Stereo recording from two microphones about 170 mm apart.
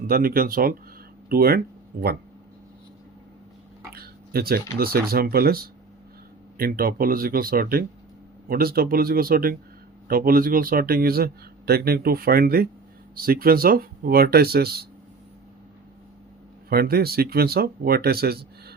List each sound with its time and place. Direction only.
0.1 s speech: 60° right (ahead or behind)
3.9 s speech: 65° right (ahead or behind)
6.6 s speech: 55° right (ahead or behind)
16.6 s speech: 60° right (ahead or behind)